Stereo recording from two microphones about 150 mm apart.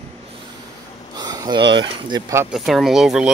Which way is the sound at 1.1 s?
25° right (ahead or behind).